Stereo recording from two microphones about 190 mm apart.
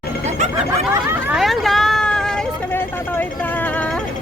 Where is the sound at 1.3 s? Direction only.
Centre (ahead or behind).